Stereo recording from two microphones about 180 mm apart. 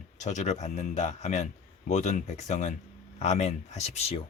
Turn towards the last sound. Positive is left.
turn(degrees=35)  # may be behind; listen again after turning